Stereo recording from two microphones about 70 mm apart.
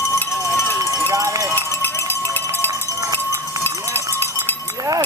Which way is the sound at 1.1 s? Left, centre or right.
Right.